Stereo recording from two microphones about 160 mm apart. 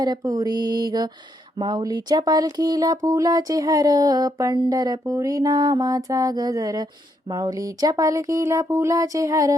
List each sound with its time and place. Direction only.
0.0 s speech: 25° right (ahead or behind)